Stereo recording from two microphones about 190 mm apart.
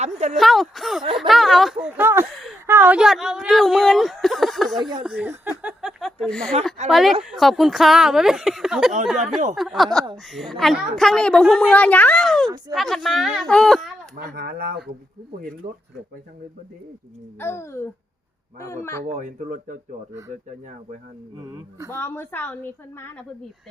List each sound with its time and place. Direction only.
0.0 s speech: 35° right (ahead or behind)
0.3 s a woman's voice: centre (ahead or behind)
1.3 s a sound: centre (ahead or behind)
2.3 s a sound: centre (ahead or behind)
2.6 s speech: 10° right (ahead or behind)
4.8 s speech: 20° right (ahead or behind)
5.0 s a sound: 10° right (ahead or behind)
6.8 s a woman's voice: centre (ahead or behind)
14.2 s speech: 55° right (ahead or behind)
15.6 s speech: 30° right (ahead or behind)
17.4 s a child's voice: 15° left (ahead or behind)
19.0 s speech: 40° right (ahead or behind)
21.3 s speech: 15° right (ahead or behind)
21.9 s a woman's voice: 10° left (ahead or behind)